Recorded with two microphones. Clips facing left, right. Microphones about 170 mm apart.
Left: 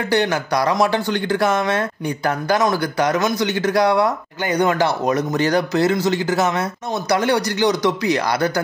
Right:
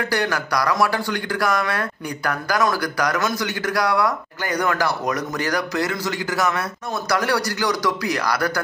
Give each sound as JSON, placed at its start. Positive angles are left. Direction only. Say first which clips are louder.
{"t": 0.1, "sound": "speech", "louder": "left 8 dB", "side_deg": 25}